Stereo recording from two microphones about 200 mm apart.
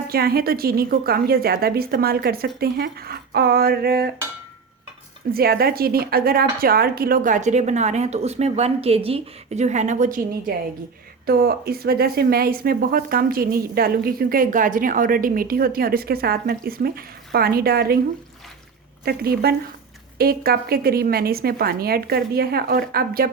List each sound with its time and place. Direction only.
0.1 s speech: 50° right (ahead or behind)
5.3 s a woman's voice: 50° right (ahead or behind)
19.0 s speech: 50° right (ahead or behind)